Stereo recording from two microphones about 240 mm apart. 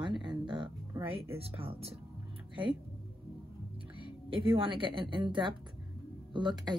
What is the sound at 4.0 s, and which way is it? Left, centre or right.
Speech, right.